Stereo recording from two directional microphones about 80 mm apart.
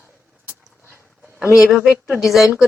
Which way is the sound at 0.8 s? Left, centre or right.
Left.